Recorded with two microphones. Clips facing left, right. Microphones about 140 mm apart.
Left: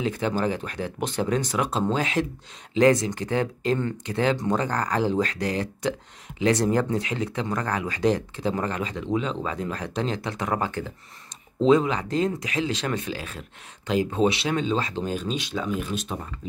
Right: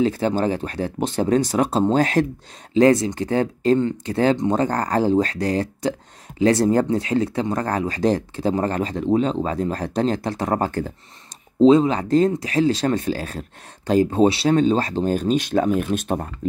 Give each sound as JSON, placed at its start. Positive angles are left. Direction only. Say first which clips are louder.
{"t": 0.0, "sound": "speech", "louder": "right 6 dB", "side_deg": -35}
{"t": 2.7, "sound": "speech", "louder": "right 4 dB", "side_deg": -30}
{"t": 11.6, "sound": "speech", "louder": "right 6 dB", "side_deg": -30}